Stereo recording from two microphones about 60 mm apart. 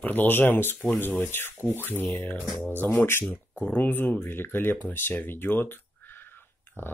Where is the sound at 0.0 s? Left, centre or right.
Left.